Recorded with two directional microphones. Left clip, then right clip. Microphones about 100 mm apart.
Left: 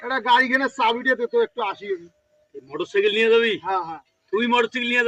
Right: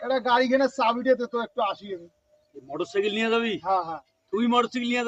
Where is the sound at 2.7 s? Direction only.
40° right (ahead or behind).